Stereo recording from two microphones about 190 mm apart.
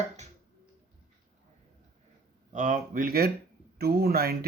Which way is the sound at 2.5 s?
40° right (ahead or behind).